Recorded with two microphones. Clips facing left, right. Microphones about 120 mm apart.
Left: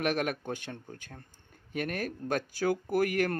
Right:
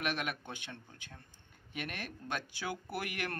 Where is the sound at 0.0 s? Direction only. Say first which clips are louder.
Left 7 dB; 40° left (ahead or behind).